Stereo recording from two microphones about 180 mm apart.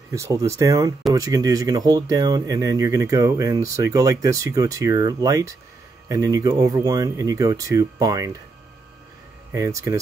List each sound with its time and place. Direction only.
0.1 s speech: 20° right (ahead or behind)
9.5 s speech: 15° right (ahead or behind)